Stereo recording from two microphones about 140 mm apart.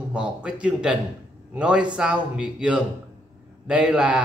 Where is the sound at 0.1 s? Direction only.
5° right (ahead or behind).